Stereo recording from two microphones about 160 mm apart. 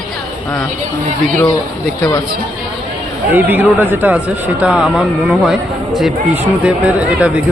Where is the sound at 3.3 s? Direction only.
10° right (ahead or behind).